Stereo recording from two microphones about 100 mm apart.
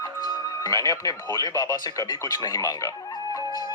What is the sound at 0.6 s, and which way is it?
Speech, 35° left (ahead or behind).